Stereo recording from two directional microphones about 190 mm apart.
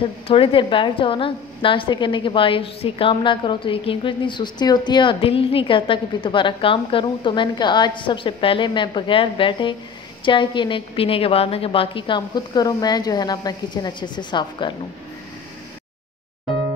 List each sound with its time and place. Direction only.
0.3 s a woman's voice: 30° left (ahead or behind)